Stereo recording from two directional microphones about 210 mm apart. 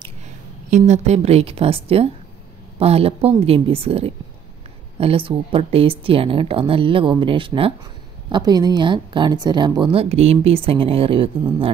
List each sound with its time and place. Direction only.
0.7 s a woman's voice: 35° right (ahead or behind)